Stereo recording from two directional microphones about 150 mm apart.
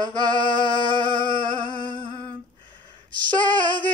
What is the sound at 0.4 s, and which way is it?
Singing, 65° right (ahead or behind).